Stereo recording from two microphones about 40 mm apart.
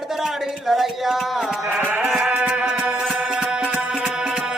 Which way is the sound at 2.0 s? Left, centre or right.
Centre.